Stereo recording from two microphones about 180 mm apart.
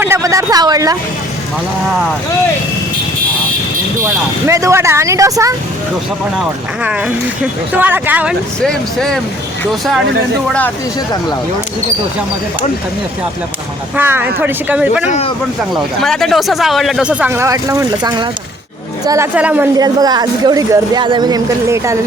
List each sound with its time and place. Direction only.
0.0 s speech: 15° right (ahead or behind)
4.0 s speech: 15° right (ahead or behind)
6.4 s speech: 5° right (ahead or behind)
8.6 s speech: 5° left (ahead or behind)
13.9 s speech: 10° right (ahead or behind)
19.7 s speech: 20° right (ahead or behind)